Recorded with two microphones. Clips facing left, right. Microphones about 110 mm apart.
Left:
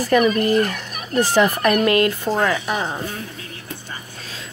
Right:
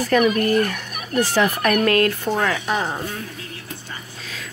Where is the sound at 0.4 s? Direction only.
25° left (ahead or behind).